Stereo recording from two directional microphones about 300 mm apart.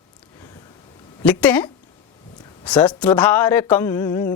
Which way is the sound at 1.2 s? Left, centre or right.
Centre.